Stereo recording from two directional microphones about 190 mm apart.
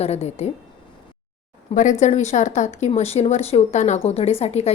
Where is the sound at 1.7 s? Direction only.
40° left (ahead or behind).